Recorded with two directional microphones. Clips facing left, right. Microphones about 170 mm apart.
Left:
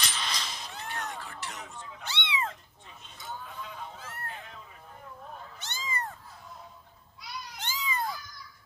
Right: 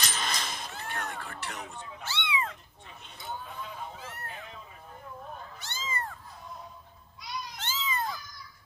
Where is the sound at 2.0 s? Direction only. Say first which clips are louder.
Right 1 dB; 20° left (ahead or behind).